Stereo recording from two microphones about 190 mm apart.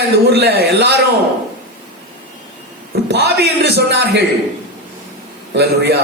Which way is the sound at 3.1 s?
60° right (ahead or behind).